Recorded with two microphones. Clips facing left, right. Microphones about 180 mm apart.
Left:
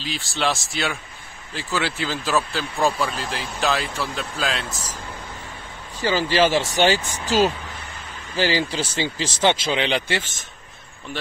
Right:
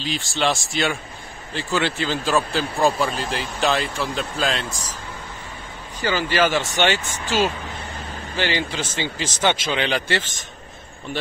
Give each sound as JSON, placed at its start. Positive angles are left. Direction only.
{"t": 0.0, "sound": "speech", "side_deg": 0}
{"t": 5.9, "sound": "speech", "side_deg": 30}